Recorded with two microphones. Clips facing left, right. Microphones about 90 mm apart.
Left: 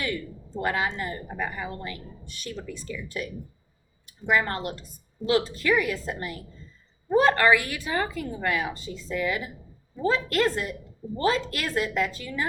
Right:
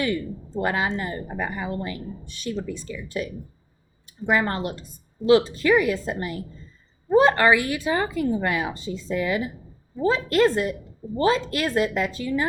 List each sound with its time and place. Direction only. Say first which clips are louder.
0.6 s a woman's voice: right 2 dB; 25° right (ahead or behind)